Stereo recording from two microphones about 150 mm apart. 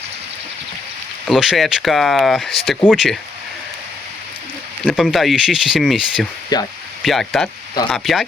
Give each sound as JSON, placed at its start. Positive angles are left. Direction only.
{"t": 1.3, "sound": "speech", "side_deg": 0}
{"t": 4.9, "sound": "speech", "side_deg": -5}
{"t": 6.5, "sound": "speech", "side_deg": 25}
{"t": 7.0, "sound": "speech", "side_deg": 0}